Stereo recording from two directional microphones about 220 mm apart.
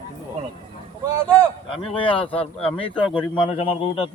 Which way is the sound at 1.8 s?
25° left (ahead or behind).